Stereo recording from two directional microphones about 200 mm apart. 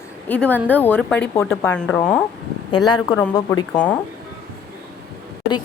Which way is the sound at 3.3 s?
20° left (ahead or behind).